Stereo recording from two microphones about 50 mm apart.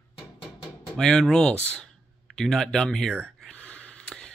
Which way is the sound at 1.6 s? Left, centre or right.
Left.